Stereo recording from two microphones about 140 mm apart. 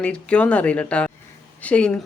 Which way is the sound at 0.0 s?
10° left (ahead or behind).